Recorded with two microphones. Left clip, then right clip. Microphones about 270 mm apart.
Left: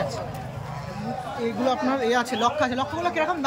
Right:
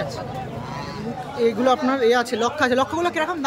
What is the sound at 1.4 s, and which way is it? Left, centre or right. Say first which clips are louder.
Speech: right 6 dB; centre.